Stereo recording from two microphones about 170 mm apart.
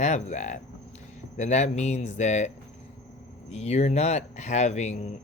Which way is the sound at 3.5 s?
40° left (ahead or behind).